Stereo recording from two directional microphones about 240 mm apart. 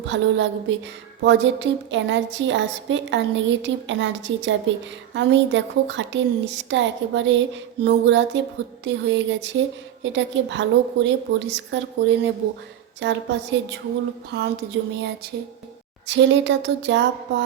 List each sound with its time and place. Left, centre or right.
0.0 s a woman's voice: right
16.0 s a woman's voice: right